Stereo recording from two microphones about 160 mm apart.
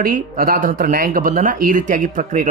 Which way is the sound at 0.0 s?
65° right (ahead or behind).